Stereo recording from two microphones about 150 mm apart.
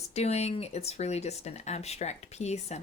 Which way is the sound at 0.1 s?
45° left (ahead or behind).